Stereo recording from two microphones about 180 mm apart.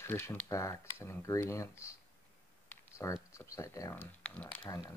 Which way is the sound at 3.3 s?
15° left (ahead or behind).